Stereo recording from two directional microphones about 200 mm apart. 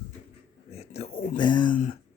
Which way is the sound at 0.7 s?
30° left (ahead or behind).